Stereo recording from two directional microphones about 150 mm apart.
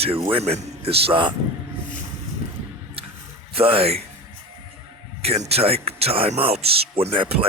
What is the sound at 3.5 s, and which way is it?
Speech, 40° right (ahead or behind).